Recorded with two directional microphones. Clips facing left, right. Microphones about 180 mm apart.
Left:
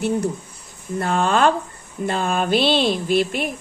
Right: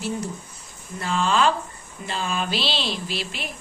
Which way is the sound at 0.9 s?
55° left (ahead or behind).